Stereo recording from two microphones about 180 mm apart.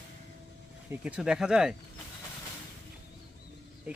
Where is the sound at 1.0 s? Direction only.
5° right (ahead or behind).